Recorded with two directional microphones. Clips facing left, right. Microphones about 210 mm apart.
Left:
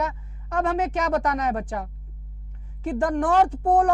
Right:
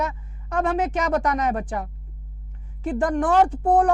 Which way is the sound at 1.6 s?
20° right (ahead or behind).